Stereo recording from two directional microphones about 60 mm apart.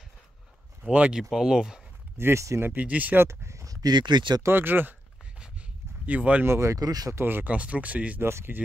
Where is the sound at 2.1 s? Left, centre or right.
Right.